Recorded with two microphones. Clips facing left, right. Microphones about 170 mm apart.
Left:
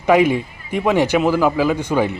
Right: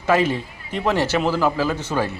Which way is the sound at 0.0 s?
15° left (ahead or behind).